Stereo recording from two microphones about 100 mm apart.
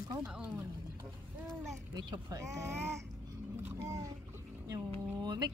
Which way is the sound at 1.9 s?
45° right (ahead or behind).